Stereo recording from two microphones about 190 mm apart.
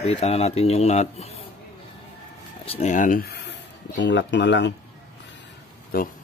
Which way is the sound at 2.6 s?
35° left (ahead or behind).